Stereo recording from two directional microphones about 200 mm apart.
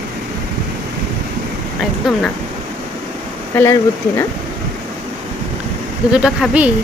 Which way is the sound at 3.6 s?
15° left (ahead or behind).